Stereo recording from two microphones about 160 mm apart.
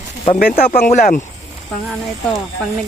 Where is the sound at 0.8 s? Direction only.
55° left (ahead or behind).